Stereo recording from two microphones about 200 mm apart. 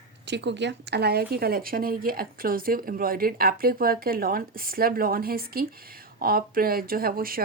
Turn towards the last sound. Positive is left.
turn(degrees=-45)  # may be behind; listen again after turning